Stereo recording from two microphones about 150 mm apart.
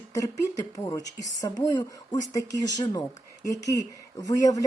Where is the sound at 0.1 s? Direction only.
25° left (ahead or behind).